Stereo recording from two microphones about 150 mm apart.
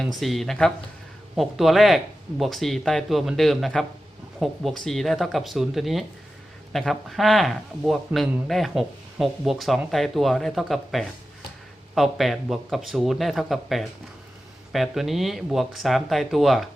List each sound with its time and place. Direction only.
0.0 s speech: centre (ahead or behind)